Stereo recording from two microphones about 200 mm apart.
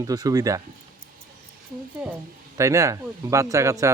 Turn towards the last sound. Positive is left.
turn(degrees=-15)  # may be behind; listen again after turning